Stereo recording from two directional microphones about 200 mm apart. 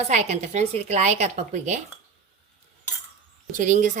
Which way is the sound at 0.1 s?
35° right (ahead or behind).